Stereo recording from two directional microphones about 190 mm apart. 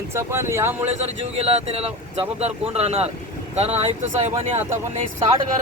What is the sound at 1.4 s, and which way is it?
Speech, 30° right (ahead or behind).